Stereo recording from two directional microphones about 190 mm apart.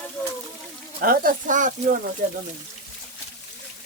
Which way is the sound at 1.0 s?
50° right (ahead or behind).